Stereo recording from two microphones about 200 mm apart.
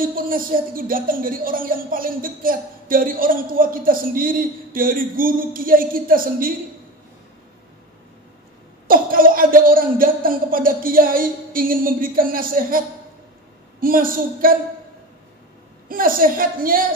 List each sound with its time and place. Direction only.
0.0 s speech: 45° right (ahead or behind)
8.8 s speech: 45° right (ahead or behind)
15.9 s speech: 45° right (ahead or behind)